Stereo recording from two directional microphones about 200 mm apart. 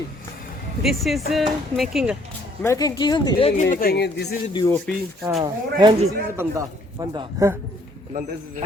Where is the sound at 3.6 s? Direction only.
50° left (ahead or behind).